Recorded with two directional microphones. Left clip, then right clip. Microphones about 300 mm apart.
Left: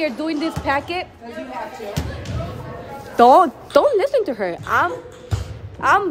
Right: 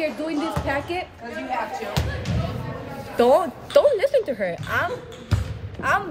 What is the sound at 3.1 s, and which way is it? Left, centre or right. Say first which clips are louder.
A woman's voice: left 7 dB; left.